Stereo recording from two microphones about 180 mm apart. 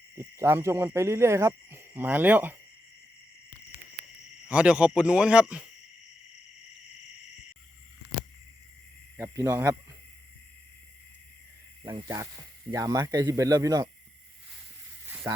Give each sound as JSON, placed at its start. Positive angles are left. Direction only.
{"t": 0.2, "sound": "speech", "side_deg": -15}
{"t": 4.4, "sound": "speech", "side_deg": -5}
{"t": 9.1, "sound": "speech", "side_deg": -15}
{"t": 12.0, "sound": "speech", "side_deg": -20}
{"t": 15.0, "sound": "sizzle", "side_deg": -15}